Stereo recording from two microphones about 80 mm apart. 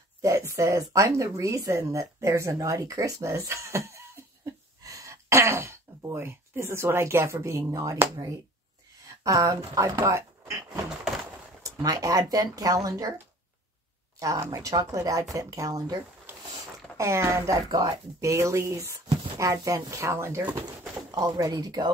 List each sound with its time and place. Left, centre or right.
0.2 s speech: right
9.2 s speech: right
11.8 s speech: right
14.5 s speech: right
16.9 s speech: right
17.6 s speech: right
18.2 s speech: right
21.1 s speech: right